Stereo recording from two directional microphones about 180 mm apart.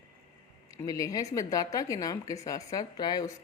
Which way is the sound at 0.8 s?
20° left (ahead or behind).